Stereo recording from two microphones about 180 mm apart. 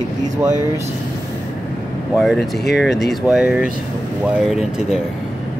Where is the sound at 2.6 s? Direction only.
75° left (ahead or behind).